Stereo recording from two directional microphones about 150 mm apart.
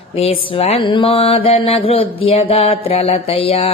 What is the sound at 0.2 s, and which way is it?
Mantra, 40° left (ahead or behind).